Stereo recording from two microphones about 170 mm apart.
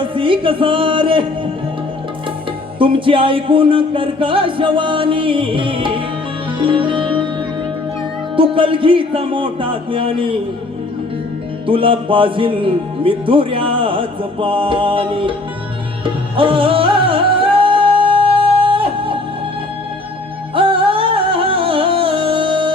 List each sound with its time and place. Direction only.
0.0 s a sound: 30° right (ahead or behind)
2.7 s speech: 30° right (ahead or behind)
6.6 s music: 30° right (ahead or behind)
8.4 s speech: 30° right (ahead or behind)
11.6 s speech: 30° right (ahead or behind)
16.0 s music: 30° right (ahead or behind)
20.6 s music: 30° right (ahead or behind)